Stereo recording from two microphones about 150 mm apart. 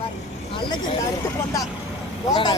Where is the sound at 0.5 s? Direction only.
35° left (ahead or behind).